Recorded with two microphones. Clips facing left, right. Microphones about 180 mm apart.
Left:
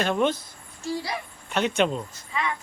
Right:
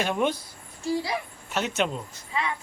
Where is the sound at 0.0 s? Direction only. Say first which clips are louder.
Left 2 dB; 10° right (ahead or behind).